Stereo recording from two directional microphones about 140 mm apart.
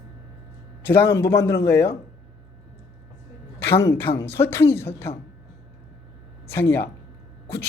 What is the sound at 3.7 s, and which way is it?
A man's voice, 20° left (ahead or behind).